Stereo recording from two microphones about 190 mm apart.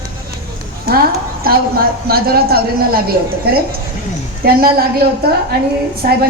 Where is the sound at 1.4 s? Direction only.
50° right (ahead or behind).